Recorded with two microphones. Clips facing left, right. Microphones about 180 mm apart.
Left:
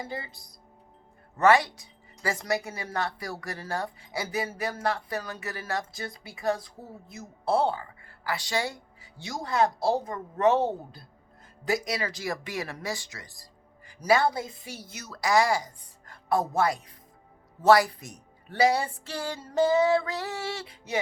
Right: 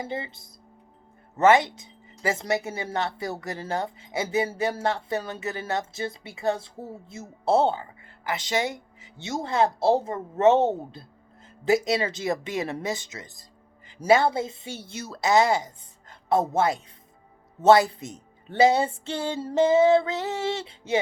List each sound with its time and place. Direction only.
0.0 s speech: 25° right (ahead or behind)